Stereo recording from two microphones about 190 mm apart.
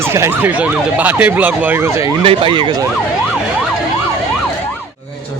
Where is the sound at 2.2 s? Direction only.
25° right (ahead or behind).